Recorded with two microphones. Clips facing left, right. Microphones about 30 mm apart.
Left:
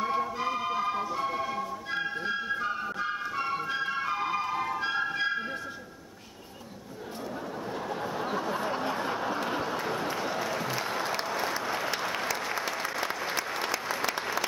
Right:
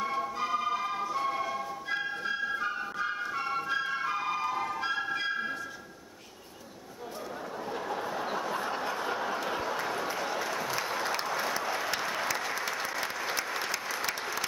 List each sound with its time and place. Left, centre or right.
0.0 s music: centre
7.7 s a sound: centre
14.1 s applause: centre